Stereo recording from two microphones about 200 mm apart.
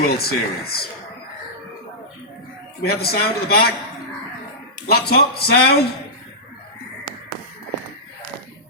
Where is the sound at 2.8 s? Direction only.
50° left (ahead or behind).